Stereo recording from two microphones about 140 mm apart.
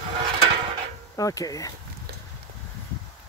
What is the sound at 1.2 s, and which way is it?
Speech, 25° left (ahead or behind).